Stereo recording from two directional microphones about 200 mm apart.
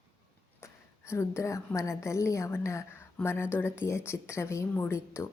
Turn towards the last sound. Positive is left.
turn(degrees=10)  # may be behind; listen again after turning